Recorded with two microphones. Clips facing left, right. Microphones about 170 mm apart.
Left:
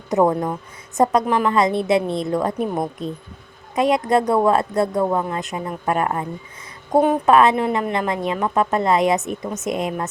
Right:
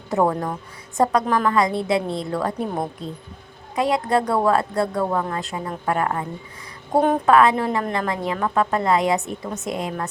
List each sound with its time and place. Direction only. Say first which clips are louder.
0.1 s a woman's voice: left 3 dB; 20° left (ahead or behind)
3.8 s a woman's voice: left 3 dB; 20° left (ahead or behind)
7.3 s a woman's voice: left 1 dB; 20° left (ahead or behind)